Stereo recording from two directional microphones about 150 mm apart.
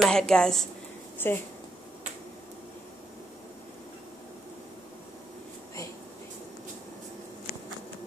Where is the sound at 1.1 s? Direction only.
15° left (ahead or behind).